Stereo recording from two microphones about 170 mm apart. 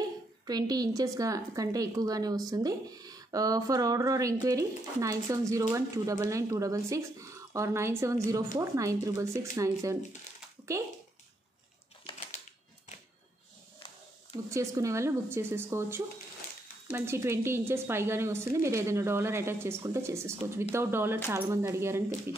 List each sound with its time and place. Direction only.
0.5 s a woman's voice: 25° right (ahead or behind)
14.3 s a woman's voice: 20° right (ahead or behind)